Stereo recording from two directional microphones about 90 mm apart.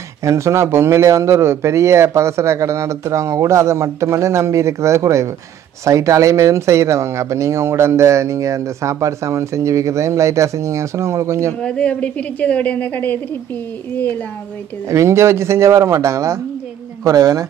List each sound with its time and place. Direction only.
0.2 s speech: 35° right (ahead or behind)
11.6 s a woman's voice: 10° left (ahead or behind)
14.9 s speech: 35° right (ahead or behind)